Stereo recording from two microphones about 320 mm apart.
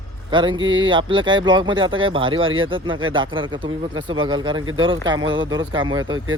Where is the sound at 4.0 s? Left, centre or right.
Right.